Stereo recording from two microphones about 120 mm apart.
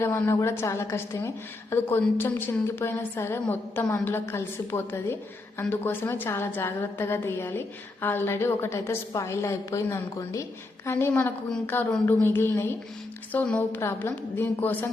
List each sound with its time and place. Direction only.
0.0 s a woman's voice: 20° left (ahead or behind)